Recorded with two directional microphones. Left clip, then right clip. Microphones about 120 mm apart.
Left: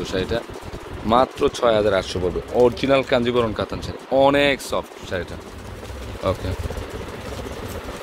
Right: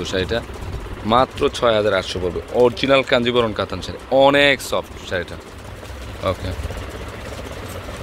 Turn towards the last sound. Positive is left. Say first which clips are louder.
# right 1 dB
turn(degrees=20)  # may be behind; listen again after turning